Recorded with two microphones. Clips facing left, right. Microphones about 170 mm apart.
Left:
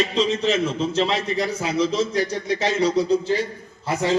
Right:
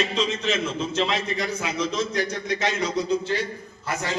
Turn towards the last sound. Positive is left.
turn(degrees=30)  # may be behind; listen again after turning